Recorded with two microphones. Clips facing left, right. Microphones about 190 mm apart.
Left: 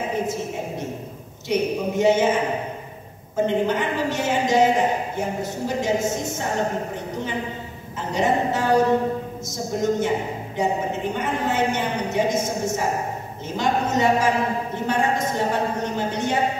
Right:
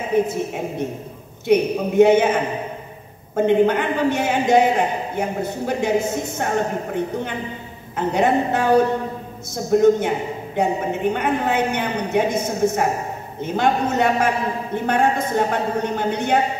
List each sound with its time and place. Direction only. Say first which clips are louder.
0.1 s a man's voice: right 11 dB; 60° right (ahead or behind)
1.5 s a man's voice: right 5 dB; 55° right (ahead or behind)
3.3 s a man's voice: right 5 dB; 60° right (ahead or behind)
8.1 s a man's voice: right 3 dB; 60° right (ahead or behind)